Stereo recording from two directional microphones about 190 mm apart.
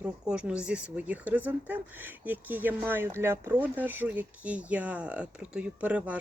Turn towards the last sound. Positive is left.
turn(degrees=-5)  # may be behind; listen again after turning